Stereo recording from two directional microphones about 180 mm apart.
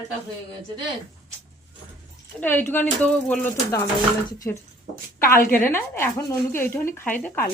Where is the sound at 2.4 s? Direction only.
10° left (ahead or behind).